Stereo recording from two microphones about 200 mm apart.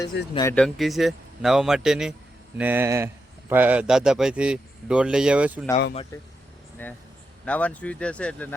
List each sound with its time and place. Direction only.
0.1 s speech: 65° left (ahead or behind)
0.5 s a man's voice: centre (ahead or behind)
6.8 s speech: 10° left (ahead or behind)